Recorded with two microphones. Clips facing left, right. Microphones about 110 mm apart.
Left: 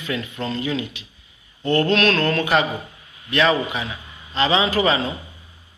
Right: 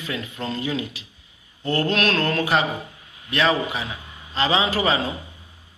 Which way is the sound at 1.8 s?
10° right (ahead or behind).